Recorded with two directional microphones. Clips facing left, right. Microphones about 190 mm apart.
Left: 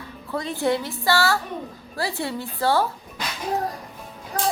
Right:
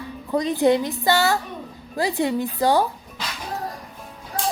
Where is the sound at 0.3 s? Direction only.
20° right (ahead or behind).